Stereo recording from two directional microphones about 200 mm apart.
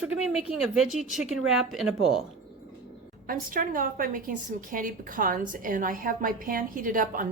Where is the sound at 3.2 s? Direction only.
45° right (ahead or behind).